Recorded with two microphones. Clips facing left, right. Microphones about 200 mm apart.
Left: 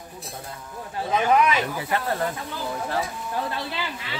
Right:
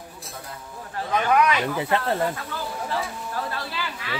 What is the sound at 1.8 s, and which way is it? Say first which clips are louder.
Speech: right 3 dB; 25° right (ahead or behind).